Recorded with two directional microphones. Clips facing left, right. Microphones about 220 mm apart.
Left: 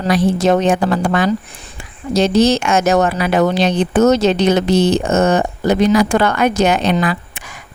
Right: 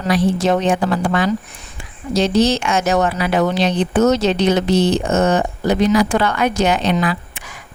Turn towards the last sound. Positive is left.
turn(degrees=50)  # may be behind; listen again after turning